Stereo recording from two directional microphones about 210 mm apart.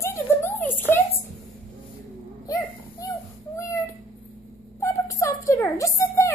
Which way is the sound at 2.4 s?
15° left (ahead or behind).